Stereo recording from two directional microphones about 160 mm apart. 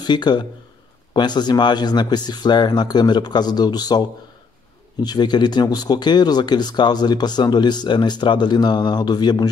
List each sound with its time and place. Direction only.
0.0 s speech: 25° left (ahead or behind)
5.0 s speech: 25° left (ahead or behind)